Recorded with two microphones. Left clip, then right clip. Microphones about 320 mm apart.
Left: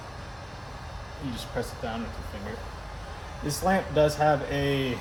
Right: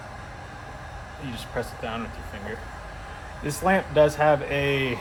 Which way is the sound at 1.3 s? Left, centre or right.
Centre.